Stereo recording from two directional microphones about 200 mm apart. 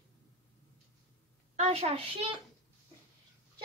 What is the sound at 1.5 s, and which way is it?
Speech, 30° right (ahead or behind).